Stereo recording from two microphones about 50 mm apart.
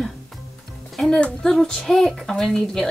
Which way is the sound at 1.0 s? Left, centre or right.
Centre.